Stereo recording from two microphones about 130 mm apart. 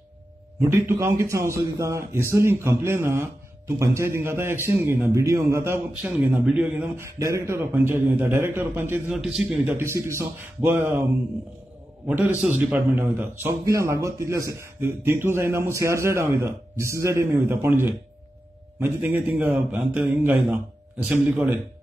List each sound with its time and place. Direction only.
0.6 s a man's voice: 20° right (ahead or behind)
9.2 s a man's voice: centre (ahead or behind)
9.7 s a man's voice: 20° right (ahead or behind)
12.1 s a man's voice: 10° right (ahead or behind)